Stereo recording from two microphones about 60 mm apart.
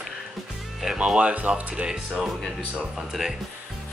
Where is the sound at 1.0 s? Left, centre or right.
Centre.